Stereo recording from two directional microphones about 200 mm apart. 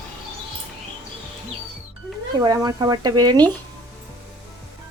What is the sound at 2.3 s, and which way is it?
Speech, 20° right (ahead or behind).